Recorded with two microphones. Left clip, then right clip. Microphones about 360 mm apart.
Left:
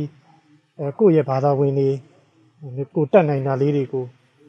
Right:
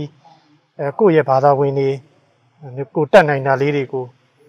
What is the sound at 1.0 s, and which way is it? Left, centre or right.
Speech, right.